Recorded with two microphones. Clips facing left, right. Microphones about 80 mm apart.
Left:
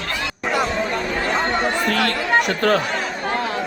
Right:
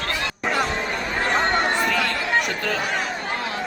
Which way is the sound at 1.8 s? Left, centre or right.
Left.